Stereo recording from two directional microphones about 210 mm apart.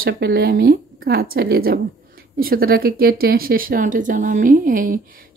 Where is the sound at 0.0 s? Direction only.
50° right (ahead or behind).